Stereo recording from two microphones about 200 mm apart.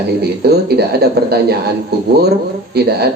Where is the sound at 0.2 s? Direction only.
55° right (ahead or behind).